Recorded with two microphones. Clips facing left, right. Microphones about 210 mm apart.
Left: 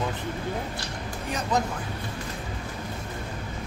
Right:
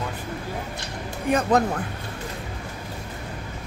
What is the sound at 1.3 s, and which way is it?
Speech, 60° right (ahead or behind).